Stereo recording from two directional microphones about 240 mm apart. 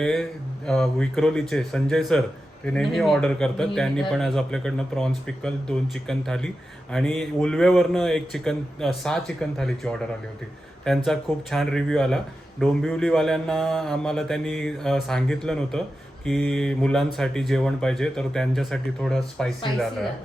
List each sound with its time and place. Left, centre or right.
0.0 s speech: centre